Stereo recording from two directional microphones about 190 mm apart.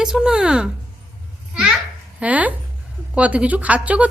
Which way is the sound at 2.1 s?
5° right (ahead or behind).